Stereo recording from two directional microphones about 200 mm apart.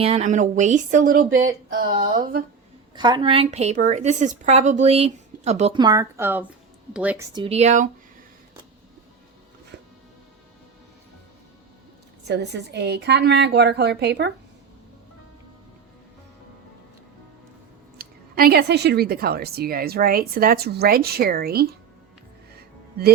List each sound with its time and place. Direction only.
0.0 s a woman's voice: 35° right (ahead or behind)
2.9 s a woman's voice: 20° right (ahead or behind)
5.8 s speech: 15° right (ahead or behind)
7.3 s a woman's voice: 30° right (ahead or behind)
9.7 s music: 60° right (ahead or behind)
12.3 s a woman's voice: 60° right (ahead or behind)
17.9 s speech: 50° right (ahead or behind)
22.5 s music: 50° right (ahead or behind)